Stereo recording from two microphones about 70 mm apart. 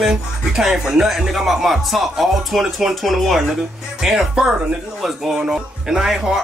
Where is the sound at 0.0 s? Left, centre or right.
Centre.